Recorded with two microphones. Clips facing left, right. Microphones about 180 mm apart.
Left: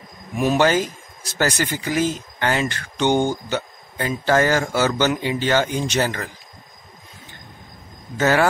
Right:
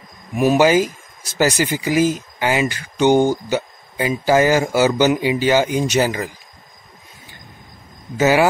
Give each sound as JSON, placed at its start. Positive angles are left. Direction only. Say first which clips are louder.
{"t": 0.4, "sound": "speech", "louder": "right 4 dB", "side_deg": -10}
{"t": 8.2, "sound": "speech", "louder": "right 3 dB", "side_deg": -10}